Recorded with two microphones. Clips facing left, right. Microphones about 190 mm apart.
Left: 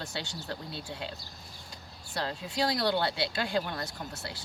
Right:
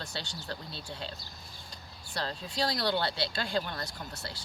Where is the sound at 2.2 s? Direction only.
15° left (ahead or behind).